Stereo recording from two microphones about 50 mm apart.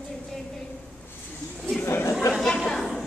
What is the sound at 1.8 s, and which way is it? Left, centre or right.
Chatter, left.